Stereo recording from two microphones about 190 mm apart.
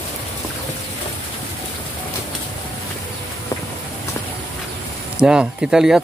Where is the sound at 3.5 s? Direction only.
15° left (ahead or behind).